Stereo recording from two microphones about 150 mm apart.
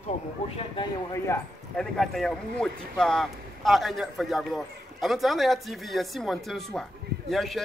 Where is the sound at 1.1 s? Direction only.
15° left (ahead or behind).